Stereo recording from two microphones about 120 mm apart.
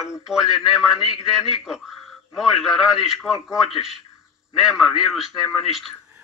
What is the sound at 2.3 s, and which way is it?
A man's voice, centre (ahead or behind).